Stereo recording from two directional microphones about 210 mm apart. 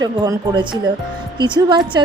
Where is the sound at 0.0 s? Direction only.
20° right (ahead or behind).